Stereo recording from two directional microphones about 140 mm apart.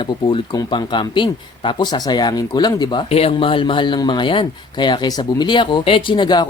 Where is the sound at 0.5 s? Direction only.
30° left (ahead or behind).